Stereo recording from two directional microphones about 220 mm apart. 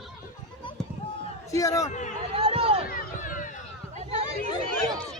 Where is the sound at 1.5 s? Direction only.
15° left (ahead or behind).